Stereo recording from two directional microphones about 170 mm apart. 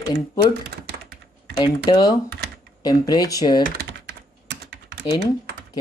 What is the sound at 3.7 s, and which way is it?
Typing, 70° right (ahead or behind).